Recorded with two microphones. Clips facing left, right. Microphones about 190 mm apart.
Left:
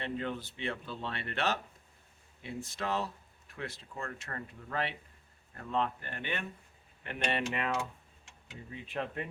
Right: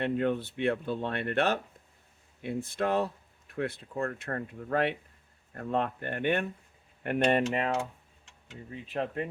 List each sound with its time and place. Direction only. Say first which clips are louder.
0.0 s speech: right 8 dB; 55° right (ahead or behind)
7.5 s speech: right 4 dB; 40° right (ahead or behind)